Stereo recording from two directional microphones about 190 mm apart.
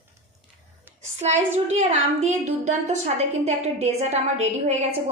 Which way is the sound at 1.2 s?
35° right (ahead or behind).